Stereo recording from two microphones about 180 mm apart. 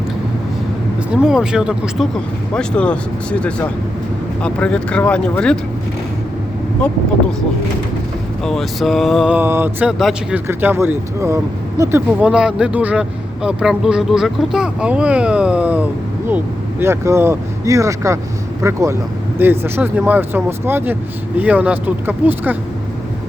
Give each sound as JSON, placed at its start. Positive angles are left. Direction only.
{"t": 1.1, "sound": "speech", "side_deg": -5}
{"t": 8.4, "sound": "speech", "side_deg": 0}